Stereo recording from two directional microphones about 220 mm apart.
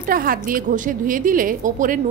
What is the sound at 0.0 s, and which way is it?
A woman's voice, 40° right (ahead or behind).